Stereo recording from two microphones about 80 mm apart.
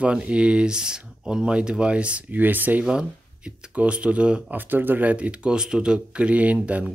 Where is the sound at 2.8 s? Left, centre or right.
Centre.